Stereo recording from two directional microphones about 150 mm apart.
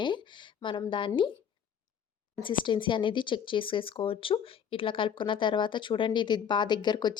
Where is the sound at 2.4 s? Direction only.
35° left (ahead or behind).